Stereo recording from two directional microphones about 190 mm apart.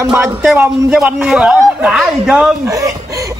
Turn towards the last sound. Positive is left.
turn(degrees=-15)  # may be behind; listen again after turning